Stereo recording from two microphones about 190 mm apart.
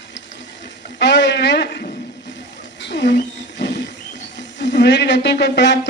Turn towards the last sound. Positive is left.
turn(degrees=65)  # may be behind; listen again after turning